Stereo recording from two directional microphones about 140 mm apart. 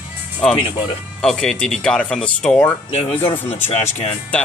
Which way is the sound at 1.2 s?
5° left (ahead or behind).